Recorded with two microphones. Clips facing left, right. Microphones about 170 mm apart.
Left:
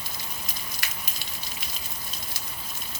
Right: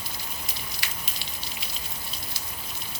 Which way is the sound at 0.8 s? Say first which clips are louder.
Left 1 dB; 45° left (ahead or behind).